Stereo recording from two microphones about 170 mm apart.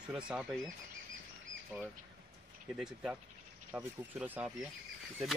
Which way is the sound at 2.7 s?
5° right (ahead or behind).